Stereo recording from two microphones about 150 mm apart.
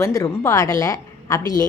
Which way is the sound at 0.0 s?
20° left (ahead or behind).